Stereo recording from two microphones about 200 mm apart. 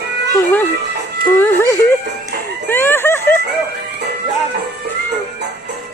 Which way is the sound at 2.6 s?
10° left (ahead or behind).